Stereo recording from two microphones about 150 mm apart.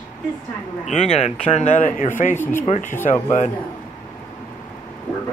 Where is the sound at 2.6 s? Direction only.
50° left (ahead or behind).